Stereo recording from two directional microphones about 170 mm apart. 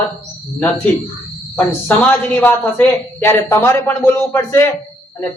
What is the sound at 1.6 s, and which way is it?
A man's voice, 10° left (ahead or behind).